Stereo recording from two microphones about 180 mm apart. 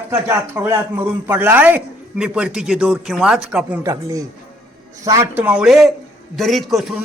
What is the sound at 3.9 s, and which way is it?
Speech, 20° right (ahead or behind).